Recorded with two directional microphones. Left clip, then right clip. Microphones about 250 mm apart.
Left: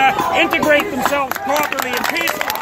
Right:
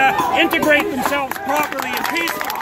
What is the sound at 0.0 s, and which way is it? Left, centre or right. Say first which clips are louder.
Speech: left 1 dB; centre.